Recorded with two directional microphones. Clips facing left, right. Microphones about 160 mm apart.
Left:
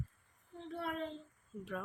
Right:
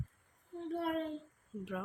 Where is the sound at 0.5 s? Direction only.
45° right (ahead or behind).